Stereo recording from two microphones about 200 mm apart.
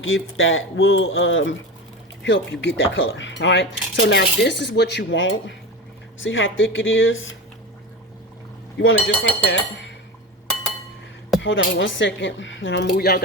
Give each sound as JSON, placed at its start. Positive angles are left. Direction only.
{"t": 0.0, "sound": "speech", "side_deg": 80}
{"t": 8.8, "sound": "speech", "side_deg": 70}
{"t": 11.4, "sound": "speech", "side_deg": 65}